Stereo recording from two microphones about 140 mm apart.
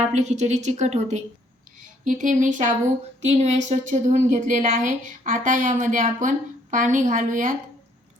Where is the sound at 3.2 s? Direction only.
50° right (ahead or behind).